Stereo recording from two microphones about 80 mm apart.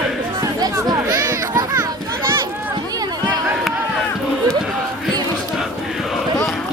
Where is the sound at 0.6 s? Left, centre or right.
Right.